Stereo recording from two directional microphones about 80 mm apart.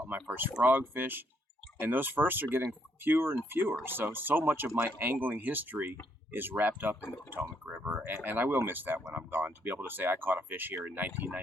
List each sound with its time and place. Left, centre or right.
0.3 s speech: right